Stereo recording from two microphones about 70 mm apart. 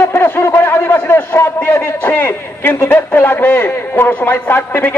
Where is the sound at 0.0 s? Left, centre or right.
Left.